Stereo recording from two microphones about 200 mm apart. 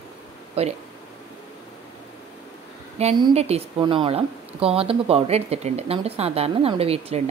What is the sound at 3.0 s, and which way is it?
Speech, 25° right (ahead or behind).